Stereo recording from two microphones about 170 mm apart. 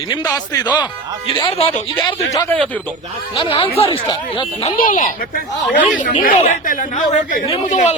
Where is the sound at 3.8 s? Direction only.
30° left (ahead or behind).